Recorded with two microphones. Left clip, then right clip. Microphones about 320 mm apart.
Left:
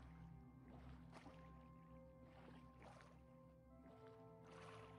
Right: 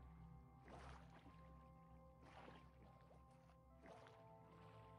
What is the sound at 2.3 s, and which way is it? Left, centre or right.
Music, centre.